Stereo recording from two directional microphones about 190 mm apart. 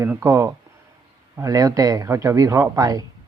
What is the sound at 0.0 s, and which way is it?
A man's voice, 15° right (ahead or behind).